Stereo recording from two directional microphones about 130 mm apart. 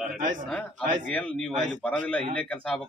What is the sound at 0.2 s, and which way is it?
Speech, 80° right.